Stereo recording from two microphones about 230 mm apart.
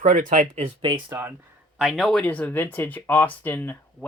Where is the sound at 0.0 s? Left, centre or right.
Right.